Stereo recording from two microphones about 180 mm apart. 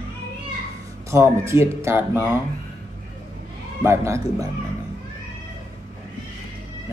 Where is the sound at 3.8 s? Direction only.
15° right (ahead or behind).